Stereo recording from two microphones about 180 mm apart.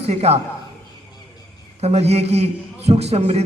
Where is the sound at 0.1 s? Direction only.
35° right (ahead or behind).